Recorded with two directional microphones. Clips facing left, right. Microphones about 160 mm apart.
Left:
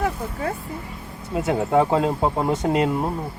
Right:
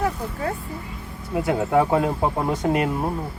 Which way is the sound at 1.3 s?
20° left (ahead or behind).